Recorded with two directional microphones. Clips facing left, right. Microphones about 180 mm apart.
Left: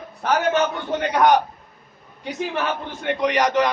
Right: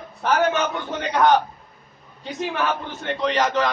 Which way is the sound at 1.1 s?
15° left (ahead or behind).